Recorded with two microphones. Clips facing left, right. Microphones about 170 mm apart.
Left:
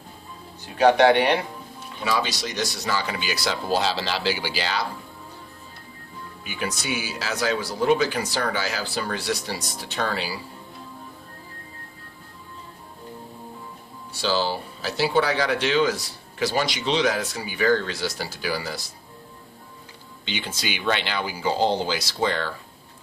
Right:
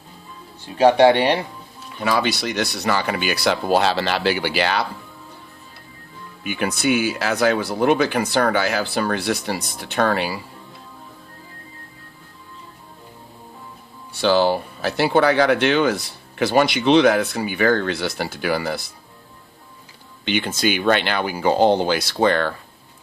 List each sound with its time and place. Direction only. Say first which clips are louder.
0.8 s speech: right 3 dB; 30° right (ahead or behind)
2.0 s speech: right 5 dB; 60° right (ahead or behind)
6.4 s speech: right 9 dB; 60° right (ahead or behind)
14.1 s speech: right 7 dB; 60° right (ahead or behind)
20.2 s speech: right 10 dB; 55° right (ahead or behind)